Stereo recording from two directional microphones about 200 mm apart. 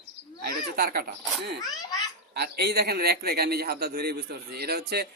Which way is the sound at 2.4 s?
55° right (ahead or behind).